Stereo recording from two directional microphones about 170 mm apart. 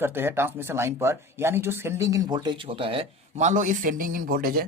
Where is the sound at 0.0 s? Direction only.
15° right (ahead or behind).